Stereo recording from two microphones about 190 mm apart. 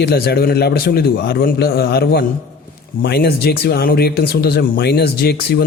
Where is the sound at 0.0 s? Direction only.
55° left (ahead or behind).